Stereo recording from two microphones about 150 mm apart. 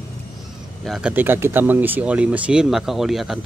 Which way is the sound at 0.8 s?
5° right (ahead or behind).